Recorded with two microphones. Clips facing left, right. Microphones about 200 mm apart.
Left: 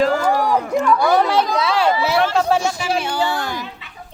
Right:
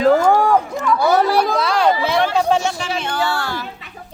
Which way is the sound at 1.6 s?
5° left (ahead or behind).